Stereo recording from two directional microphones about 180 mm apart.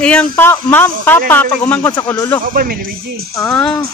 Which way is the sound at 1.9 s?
20° left (ahead or behind).